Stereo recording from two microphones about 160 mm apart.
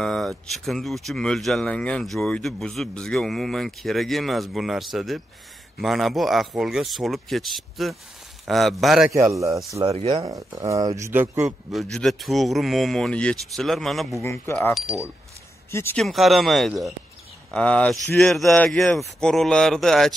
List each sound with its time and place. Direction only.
0.0 s a sound: centre (ahead or behind)
0.5 s speech: centre (ahead or behind)
9.1 s speech: 20° right (ahead or behind)
9.8 s speech: 35° right (ahead or behind)
10.2 s speech: 20° right (ahead or behind)
11.4 s speech: centre (ahead or behind)
14.2 s speech: 15° left (ahead or behind)
14.7 s speech: centre (ahead or behind)
15.7 s speech: 15° left (ahead or behind)
16.0 s speech: centre (ahead or behind)